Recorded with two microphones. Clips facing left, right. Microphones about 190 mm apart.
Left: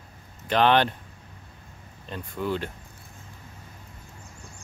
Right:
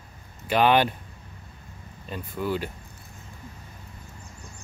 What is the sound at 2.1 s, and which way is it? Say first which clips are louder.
Speech: right 1 dB; 5° right (ahead or behind).